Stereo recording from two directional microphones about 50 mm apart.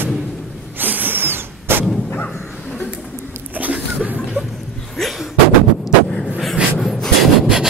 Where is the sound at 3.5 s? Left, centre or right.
Right.